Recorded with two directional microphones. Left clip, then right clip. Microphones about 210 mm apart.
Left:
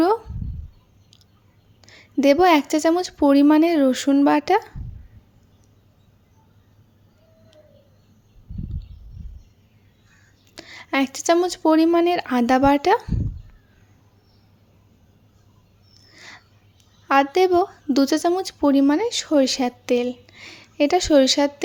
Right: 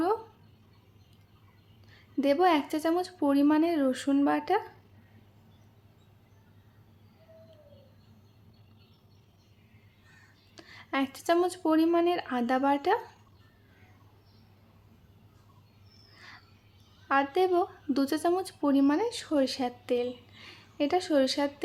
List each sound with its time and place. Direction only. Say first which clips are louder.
1.9 s speech: left 10 dB; 35° left (ahead or behind)
10.5 s speech: left 9 dB; 35° left (ahead or behind)
16.1 s a sound: left 8 dB; 30° left (ahead or behind)
17.1 s speech: left 9 dB; 30° left (ahead or behind)